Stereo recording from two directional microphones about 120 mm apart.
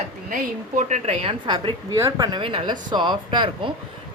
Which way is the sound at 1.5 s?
30° right (ahead or behind).